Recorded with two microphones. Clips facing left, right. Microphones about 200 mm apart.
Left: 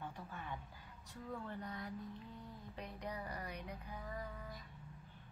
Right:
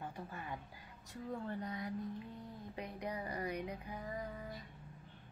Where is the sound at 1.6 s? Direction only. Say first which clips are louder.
Right 5 dB; 15° right (ahead or behind).